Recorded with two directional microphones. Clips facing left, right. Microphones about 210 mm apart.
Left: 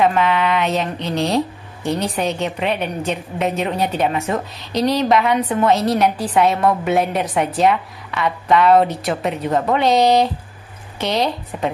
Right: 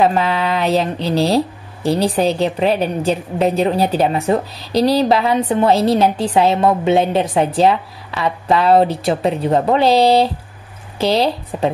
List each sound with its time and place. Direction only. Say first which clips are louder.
0.0 s speech: right 1 dB; 35° right (ahead or behind)